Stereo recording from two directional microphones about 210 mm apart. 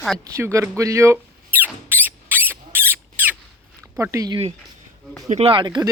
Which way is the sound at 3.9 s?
15° right (ahead or behind).